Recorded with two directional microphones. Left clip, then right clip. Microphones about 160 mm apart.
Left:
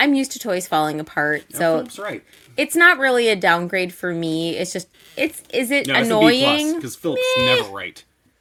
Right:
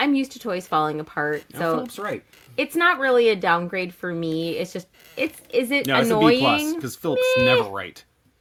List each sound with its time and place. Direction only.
0.0 s a woman's voice: 35° left (ahead or behind)
6.8 s speech: 30° right (ahead or behind)
7.2 s a woman's voice: 30° left (ahead or behind)
7.8 s speech: 30° right (ahead or behind)